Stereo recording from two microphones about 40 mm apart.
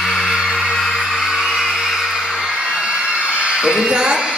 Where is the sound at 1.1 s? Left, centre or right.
Centre.